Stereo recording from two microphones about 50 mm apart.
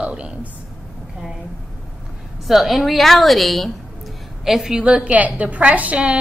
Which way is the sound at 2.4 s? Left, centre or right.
Centre.